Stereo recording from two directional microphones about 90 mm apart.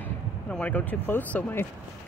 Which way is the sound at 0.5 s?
15° left (ahead or behind).